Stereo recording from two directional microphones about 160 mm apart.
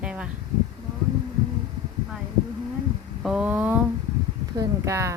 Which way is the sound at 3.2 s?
5° right (ahead or behind).